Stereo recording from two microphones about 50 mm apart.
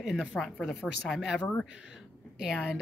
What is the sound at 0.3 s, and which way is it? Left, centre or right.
Speech, centre.